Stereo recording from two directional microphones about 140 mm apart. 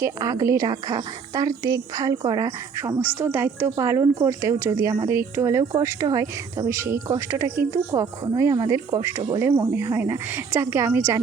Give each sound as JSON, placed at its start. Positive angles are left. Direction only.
{"t": 0.0, "sound": "a woman's voice", "side_deg": -25}